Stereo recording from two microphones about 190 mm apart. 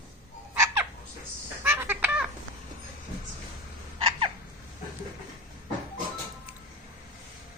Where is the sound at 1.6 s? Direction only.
10° right (ahead or behind).